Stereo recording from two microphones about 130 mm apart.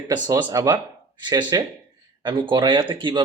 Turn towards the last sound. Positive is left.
turn(degrees=-40)  # may be behind; listen again after turning